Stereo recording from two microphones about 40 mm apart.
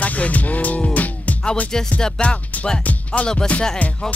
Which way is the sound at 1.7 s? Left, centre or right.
Centre.